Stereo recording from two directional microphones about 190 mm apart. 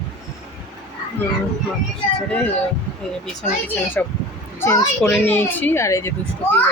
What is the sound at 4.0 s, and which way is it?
A child's voice, 10° left (ahead or behind).